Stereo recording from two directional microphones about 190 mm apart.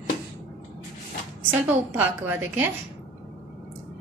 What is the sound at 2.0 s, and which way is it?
Speech, 10° right (ahead or behind).